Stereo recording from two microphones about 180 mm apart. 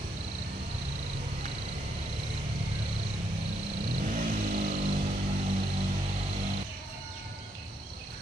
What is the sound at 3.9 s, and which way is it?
Vehicle, 45° right (ahead or behind).